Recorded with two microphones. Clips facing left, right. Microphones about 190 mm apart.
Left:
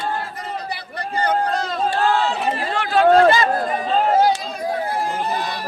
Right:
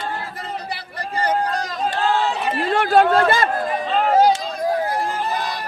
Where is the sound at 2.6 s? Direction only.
55° right (ahead or behind).